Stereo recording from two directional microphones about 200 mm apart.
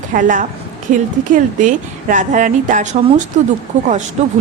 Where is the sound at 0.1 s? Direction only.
40° right (ahead or behind).